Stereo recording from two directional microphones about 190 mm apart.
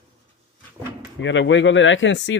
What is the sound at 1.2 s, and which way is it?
Speech, 75° left (ahead or behind).